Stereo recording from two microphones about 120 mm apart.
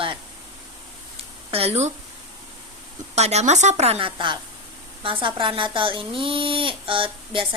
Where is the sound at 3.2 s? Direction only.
65° right (ahead or behind).